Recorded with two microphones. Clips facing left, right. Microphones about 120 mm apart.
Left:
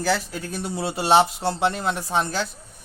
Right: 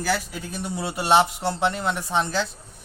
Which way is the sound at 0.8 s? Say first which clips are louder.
Left 1 dB; 25° left (ahead or behind).